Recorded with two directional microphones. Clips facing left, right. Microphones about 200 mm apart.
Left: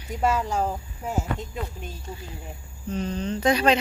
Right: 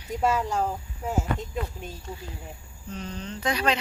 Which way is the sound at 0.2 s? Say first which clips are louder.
Left 1 dB; 5° left (ahead or behind).